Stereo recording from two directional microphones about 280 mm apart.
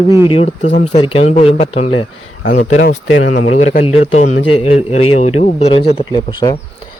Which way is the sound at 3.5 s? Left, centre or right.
Left.